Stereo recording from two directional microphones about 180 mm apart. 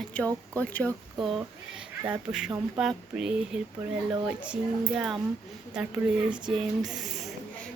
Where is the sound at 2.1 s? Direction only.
5° right (ahead or behind).